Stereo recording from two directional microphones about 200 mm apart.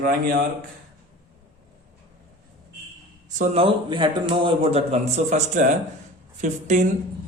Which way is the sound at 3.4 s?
30° right (ahead or behind).